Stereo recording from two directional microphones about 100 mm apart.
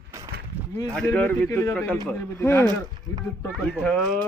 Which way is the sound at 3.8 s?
10° left (ahead or behind).